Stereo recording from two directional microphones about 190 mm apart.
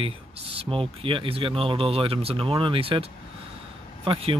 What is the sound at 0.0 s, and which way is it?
Speech, 30° right (ahead or behind).